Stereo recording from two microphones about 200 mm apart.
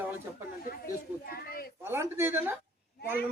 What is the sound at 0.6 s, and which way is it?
Speech, 45° left (ahead or behind).